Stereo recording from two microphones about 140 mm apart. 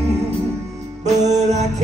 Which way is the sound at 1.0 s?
55° right (ahead or behind).